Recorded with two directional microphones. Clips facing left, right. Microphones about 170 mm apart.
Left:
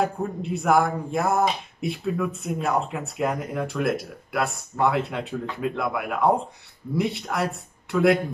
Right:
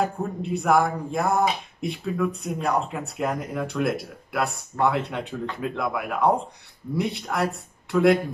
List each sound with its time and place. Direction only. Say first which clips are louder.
0.0 s speech: left 1 dB; centre (ahead or behind)